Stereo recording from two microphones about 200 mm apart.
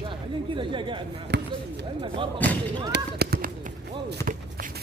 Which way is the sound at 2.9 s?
50° right (ahead or behind).